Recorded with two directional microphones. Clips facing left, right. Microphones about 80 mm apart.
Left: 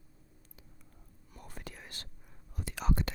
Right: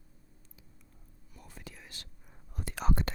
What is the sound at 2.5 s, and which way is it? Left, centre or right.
Whispering, right.